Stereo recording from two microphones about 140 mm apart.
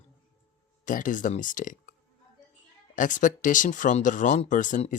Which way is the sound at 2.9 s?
65° left (ahead or behind).